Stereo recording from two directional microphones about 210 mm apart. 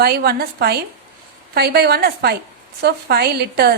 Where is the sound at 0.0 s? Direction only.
50° right (ahead or behind).